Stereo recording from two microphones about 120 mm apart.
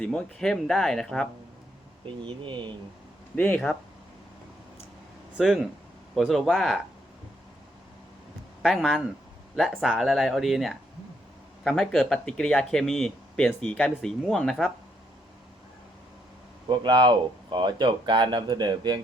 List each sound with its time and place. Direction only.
0.0 s speech: 5° left (ahead or behind)
2.2 s speech: 40° right (ahead or behind)
3.3 s speech: 15° left (ahead or behind)
5.4 s speech: centre (ahead or behind)
8.6 s speech: centre (ahead or behind)
16.6 s speech: 40° right (ahead or behind)